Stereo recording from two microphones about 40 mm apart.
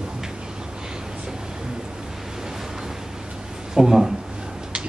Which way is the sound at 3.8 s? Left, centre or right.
Centre.